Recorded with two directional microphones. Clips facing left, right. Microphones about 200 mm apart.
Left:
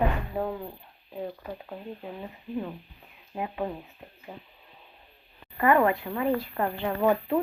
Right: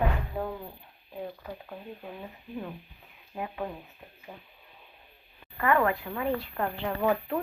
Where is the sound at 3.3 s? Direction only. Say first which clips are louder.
Left 3 dB; 15° left (ahead or behind).